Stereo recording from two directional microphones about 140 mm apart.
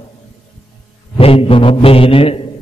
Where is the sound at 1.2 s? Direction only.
45° left (ahead or behind).